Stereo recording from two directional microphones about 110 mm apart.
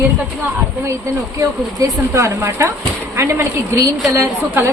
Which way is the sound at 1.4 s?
25° right (ahead or behind).